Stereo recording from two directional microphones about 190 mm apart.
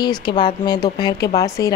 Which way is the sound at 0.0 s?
20° left (ahead or behind).